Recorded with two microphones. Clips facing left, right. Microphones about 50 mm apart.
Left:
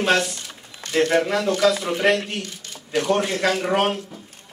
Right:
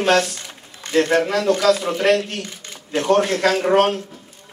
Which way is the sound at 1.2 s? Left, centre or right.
Centre.